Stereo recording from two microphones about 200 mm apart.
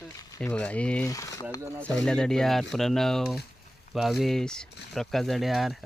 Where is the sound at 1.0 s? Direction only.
15° left (ahead or behind).